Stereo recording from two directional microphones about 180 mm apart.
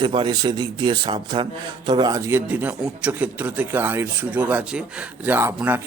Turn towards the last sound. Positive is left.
turn(degrees=-10)  # may be behind; listen again after turning